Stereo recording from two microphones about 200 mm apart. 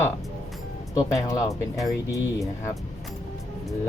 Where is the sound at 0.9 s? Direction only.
15° left (ahead or behind).